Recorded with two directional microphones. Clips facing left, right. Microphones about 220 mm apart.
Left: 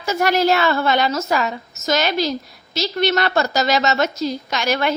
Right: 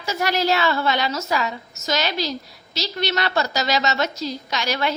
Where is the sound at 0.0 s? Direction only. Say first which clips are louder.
Left 5 dB; 50° left (ahead or behind).